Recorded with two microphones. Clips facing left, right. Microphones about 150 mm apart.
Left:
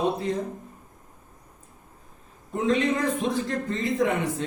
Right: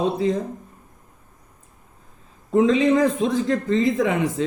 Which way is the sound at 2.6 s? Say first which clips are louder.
Right 7 dB; 90° right.